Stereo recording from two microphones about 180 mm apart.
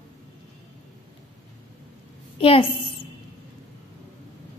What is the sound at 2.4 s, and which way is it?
Speech, 30° left (ahead or behind).